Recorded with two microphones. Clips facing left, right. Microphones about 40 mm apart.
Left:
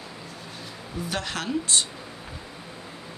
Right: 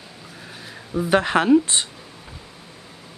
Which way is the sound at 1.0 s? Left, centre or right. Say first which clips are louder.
Right 12 dB; right.